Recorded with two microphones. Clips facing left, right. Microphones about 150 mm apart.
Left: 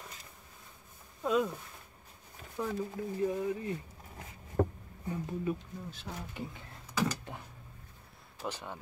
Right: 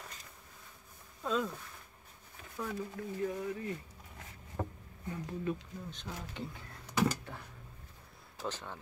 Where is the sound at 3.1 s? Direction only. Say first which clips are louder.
Left 4 dB; 20° left (ahead or behind).